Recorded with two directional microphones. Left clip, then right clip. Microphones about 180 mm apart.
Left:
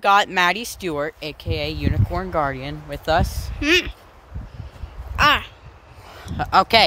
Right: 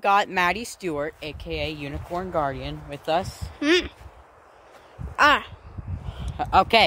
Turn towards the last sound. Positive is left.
turn(degrees=0)  # may be behind; listen again after turning